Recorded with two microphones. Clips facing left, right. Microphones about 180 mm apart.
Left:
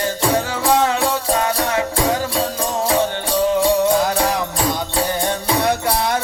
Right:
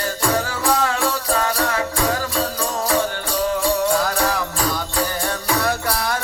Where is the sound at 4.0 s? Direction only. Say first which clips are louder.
Left 3 dB; 20° left (ahead or behind).